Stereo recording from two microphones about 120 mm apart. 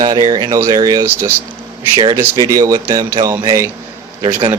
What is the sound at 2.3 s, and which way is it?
Speech, 30° right (ahead or behind).